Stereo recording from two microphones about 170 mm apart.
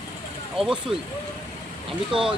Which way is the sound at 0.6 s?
Centre (ahead or behind).